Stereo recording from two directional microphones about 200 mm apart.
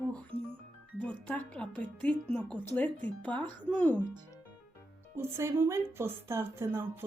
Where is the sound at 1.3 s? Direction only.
5° left (ahead or behind).